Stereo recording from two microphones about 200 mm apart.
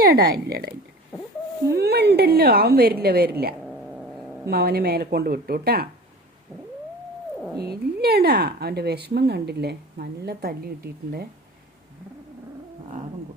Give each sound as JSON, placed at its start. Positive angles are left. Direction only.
{"t": 0.0, "sound": "speech", "side_deg": -50}
{"t": 1.7, "sound": "speech", "side_deg": -55}
{"t": 3.6, "sound": "cat", "side_deg": 0}
{"t": 4.4, "sound": "speech", "side_deg": -50}
{"t": 7.6, "sound": "speech", "side_deg": -50}